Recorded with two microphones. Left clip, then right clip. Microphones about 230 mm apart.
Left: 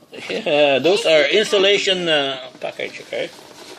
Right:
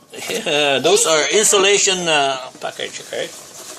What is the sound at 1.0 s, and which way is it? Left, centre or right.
Speech, right.